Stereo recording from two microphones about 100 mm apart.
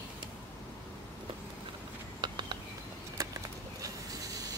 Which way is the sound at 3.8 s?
35° right (ahead or behind).